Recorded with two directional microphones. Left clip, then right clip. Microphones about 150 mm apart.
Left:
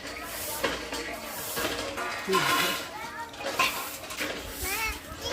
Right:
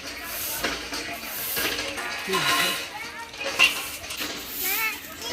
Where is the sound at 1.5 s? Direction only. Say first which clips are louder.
Right 4 dB; 65° right (ahead or behind).